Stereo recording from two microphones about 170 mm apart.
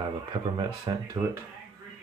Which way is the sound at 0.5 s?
20° right (ahead or behind).